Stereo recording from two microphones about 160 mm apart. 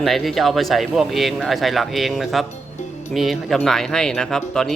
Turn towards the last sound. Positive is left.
turn(degrees=5)  # may be behind; listen again after turning